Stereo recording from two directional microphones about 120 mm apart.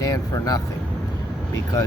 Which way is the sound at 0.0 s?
30° left (ahead or behind).